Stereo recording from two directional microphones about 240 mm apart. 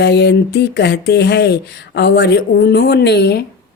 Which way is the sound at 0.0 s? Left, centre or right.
Left.